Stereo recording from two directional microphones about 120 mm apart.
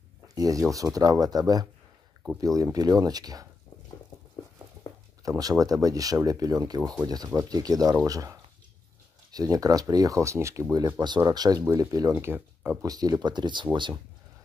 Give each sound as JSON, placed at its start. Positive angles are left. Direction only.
{"t": 0.3, "sound": "speech", "side_deg": -30}
{"t": 5.4, "sound": "speech", "side_deg": -30}
{"t": 12.8, "sound": "speech", "side_deg": -30}